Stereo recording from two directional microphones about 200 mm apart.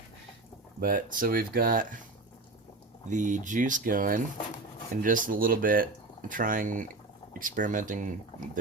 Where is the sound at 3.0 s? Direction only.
40° right (ahead or behind).